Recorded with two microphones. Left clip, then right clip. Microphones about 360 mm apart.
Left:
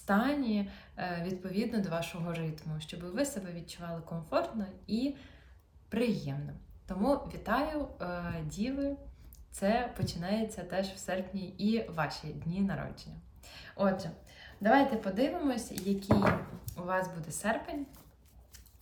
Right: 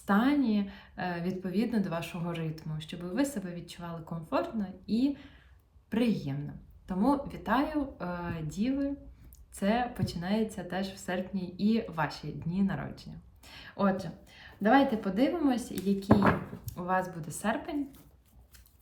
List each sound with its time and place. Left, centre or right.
0.0 s a woman's voice: centre
3.8 s speech: left
4.4 s a woman's voice: centre